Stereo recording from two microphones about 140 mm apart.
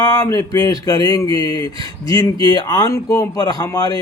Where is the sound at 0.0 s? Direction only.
25° left (ahead or behind).